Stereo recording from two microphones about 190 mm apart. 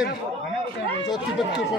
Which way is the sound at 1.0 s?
20° left (ahead or behind).